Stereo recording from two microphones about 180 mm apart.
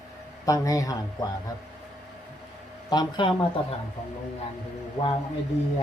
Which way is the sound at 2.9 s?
25° left (ahead or behind).